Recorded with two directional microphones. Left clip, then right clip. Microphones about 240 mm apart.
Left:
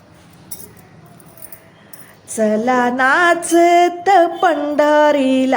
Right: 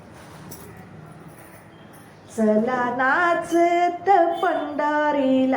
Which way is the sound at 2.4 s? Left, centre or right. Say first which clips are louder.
Left 6 dB; left.